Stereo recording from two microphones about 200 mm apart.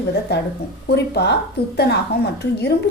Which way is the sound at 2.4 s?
55° left (ahead or behind).